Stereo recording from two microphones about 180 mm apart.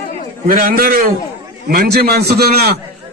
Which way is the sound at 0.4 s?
55° right (ahead or behind).